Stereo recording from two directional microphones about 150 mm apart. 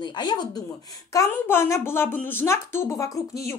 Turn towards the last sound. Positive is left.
turn(degrees=20)  # may be behind; listen again after turning